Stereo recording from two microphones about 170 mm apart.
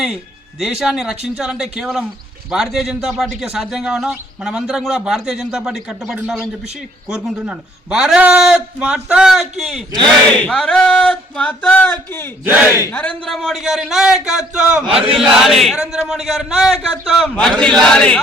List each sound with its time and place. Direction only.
0.6 s a man's voice: centre (ahead or behind)
14.8 s chant: 35° right (ahead or behind)
15.1 s a man's voice: 5° right (ahead or behind)